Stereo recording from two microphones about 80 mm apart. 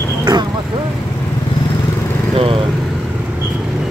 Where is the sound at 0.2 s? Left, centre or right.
Right.